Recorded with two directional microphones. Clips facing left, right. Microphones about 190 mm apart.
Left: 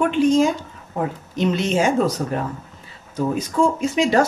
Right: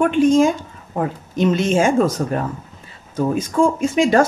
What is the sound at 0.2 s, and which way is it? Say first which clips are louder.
Speech: right 2 dB; 50° right (ahead or behind).